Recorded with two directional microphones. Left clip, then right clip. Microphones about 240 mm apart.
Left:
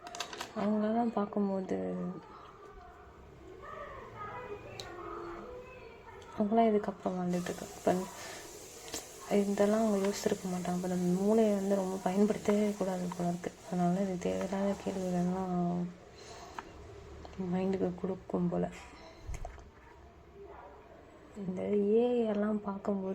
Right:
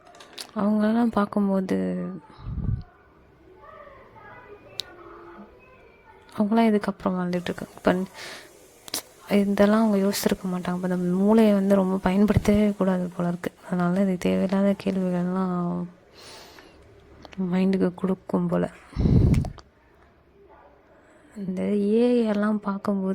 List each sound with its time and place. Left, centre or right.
0.5 s speech: right
6.3 s speech: right
17.3 s speech: right
21.5 s speech: right